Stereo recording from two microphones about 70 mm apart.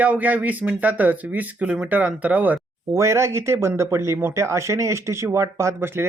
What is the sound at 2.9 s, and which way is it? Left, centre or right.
Speech, right.